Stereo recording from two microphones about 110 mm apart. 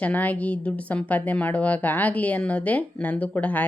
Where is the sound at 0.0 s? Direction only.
15° left (ahead or behind).